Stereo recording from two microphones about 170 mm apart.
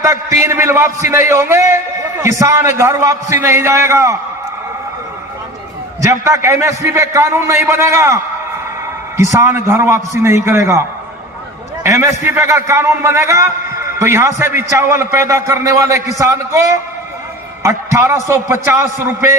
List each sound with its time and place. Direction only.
0.0 s a man's voice: 20° right (ahead or behind)
6.0 s a man's voice: 20° right (ahead or behind)